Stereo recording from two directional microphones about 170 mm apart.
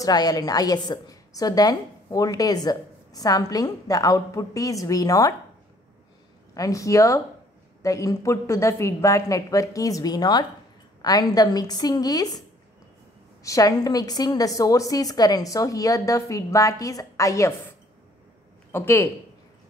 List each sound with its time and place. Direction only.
0.0 s a woman's voice: 20° left (ahead or behind)
6.5 s a woman's voice: 20° left (ahead or behind)
13.4 s a woman's voice: 20° left (ahead or behind)
18.7 s speech: 15° left (ahead or behind)